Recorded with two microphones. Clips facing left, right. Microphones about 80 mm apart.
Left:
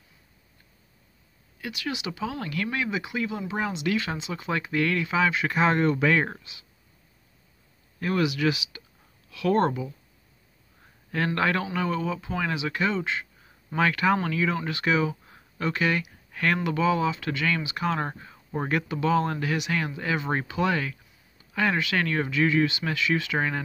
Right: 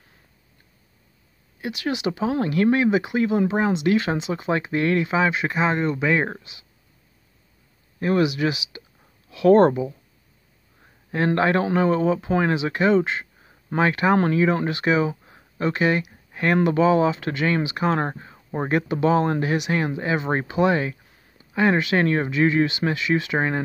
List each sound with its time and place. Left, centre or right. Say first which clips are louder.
1.6 s speech: right 7 dB; right
5.6 s speech: left 1 dB; centre
8.0 s speech: right 4 dB; right
9.3 s speech: right 8 dB; right
11.1 s speech: right 5 dB; right
14.1 s speech: right 7 dB; right